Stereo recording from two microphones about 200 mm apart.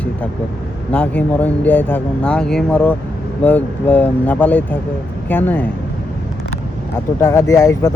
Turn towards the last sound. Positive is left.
turn(degrees=15)  # may be behind; listen again after turning